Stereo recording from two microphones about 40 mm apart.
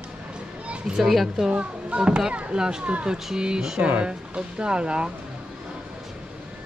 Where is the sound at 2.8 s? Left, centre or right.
Right.